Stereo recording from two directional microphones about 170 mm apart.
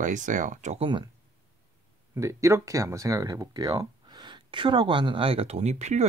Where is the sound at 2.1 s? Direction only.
15° right (ahead or behind); by 6.0 s 40° right (ahead or behind).